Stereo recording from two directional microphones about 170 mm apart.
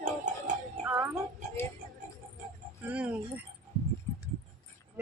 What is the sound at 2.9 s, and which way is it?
Speech, 10° right (ahead or behind).